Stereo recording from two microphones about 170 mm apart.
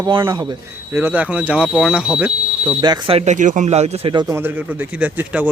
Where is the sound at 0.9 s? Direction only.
10° right (ahead or behind).